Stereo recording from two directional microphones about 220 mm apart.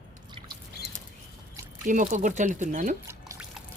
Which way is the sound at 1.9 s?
35° right (ahead or behind).